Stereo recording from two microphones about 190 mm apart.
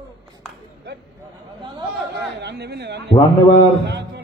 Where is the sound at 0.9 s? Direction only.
60° right (ahead or behind).